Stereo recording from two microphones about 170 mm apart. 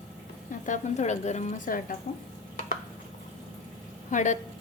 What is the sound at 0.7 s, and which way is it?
A woman's voice, 45° left (ahead or behind).